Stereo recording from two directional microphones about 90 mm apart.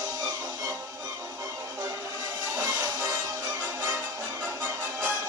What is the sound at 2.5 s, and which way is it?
Music, 40° right (ahead or behind).